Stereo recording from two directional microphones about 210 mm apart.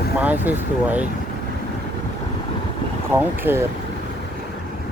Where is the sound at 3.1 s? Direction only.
10° right (ahead or behind).